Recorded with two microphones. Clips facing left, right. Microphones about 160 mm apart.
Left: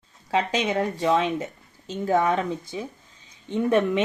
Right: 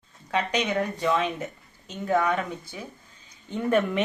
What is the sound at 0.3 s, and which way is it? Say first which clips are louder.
A woman's voice: left 2 dB; 30° left (ahead or behind).